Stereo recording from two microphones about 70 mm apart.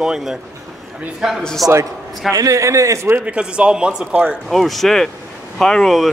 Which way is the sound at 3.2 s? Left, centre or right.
Centre.